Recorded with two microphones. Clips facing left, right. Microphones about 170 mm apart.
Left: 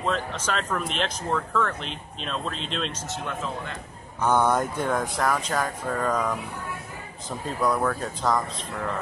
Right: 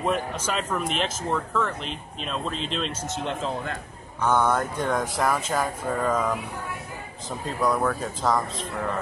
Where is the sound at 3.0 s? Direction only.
20° right (ahead or behind).